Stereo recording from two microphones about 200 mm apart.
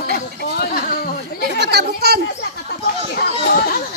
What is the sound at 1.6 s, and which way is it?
Children playing, 55° right (ahead or behind).